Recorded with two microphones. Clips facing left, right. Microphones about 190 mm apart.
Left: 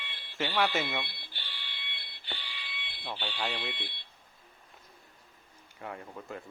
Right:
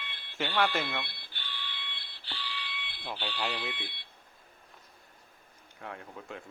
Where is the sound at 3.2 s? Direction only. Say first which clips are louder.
Right 1 dB; 5° right (ahead or behind).